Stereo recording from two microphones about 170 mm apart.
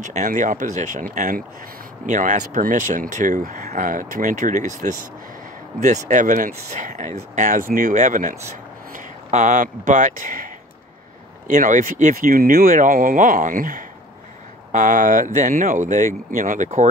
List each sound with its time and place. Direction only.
0.0 s speech: 45° right (ahead or behind)